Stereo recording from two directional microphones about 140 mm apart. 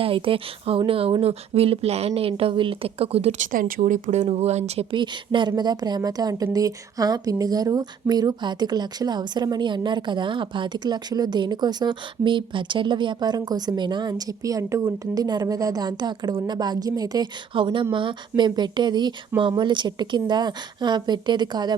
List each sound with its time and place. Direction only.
0.0 s a woman's voice: 40° right (ahead or behind)